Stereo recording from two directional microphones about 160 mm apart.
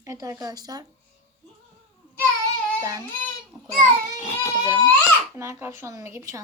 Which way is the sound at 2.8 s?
20° right (ahead or behind).